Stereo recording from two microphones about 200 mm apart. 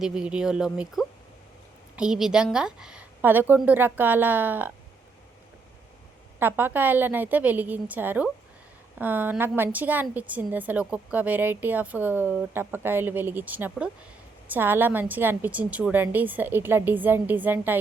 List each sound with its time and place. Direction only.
0.0 s a woman's voice: 5° right (ahead or behind)
6.4 s a woman's voice: 10° right (ahead or behind)